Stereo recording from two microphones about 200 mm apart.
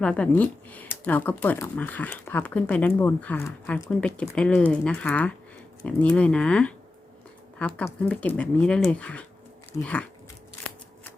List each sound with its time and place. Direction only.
0.0 s speech: 5° left (ahead or behind)